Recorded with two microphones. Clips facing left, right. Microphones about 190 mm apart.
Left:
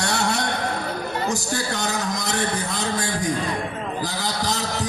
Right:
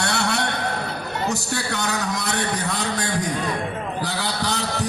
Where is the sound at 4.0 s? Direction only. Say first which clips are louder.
Even; 65° right (ahead or behind).